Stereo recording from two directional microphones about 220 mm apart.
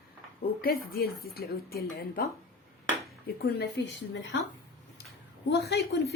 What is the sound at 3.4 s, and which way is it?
Speech, 45° left (ahead or behind).